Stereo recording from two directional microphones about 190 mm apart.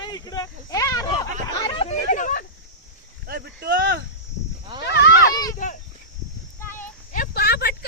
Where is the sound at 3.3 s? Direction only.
55° right (ahead or behind).